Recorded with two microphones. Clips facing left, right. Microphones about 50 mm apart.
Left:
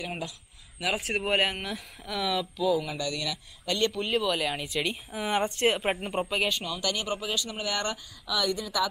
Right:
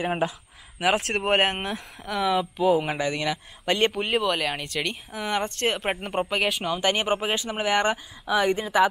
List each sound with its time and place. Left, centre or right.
0.0 s speech: right
0.7 s speech: right
2.1 s speech: right
2.7 s speech: right
4.1 s speech: centre
5.9 s speech: centre
6.6 s speech: right
8.3 s speech: right